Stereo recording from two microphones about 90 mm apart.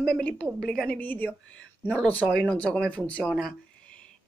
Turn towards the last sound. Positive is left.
turn(degrees=15)  # may be behind; listen again after turning